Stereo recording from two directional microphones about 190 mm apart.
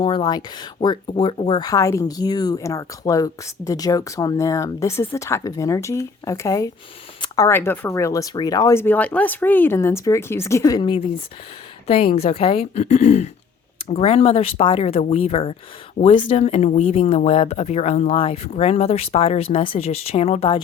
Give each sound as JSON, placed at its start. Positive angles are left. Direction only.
{"t": 0.0, "sound": "speech", "side_deg": 25}